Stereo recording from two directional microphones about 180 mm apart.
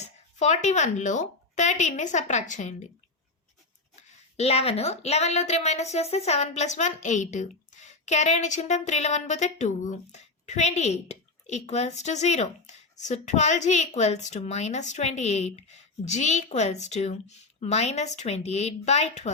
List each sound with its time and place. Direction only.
0.0 s speech: 40° left (ahead or behind)
4.4 s speech: 35° left (ahead or behind)